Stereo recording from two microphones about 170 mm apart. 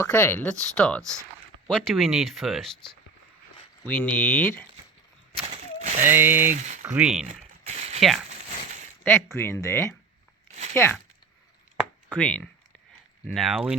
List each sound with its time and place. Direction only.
0.0 s speech: 10° left (ahead or behind)
5.3 s a sound: 35° right (ahead or behind)
6.0 s speech: 10° right (ahead or behind)
6.5 s speech: 45° right (ahead or behind)
6.8 s speech: 5° right (ahead or behind)
7.6 s a sound: 40° right (ahead or behind)
9.0 s speech: 15° left (ahead or behind)
10.5 s a sound: 40° right (ahead or behind)
12.1 s speech: 5° left (ahead or behind)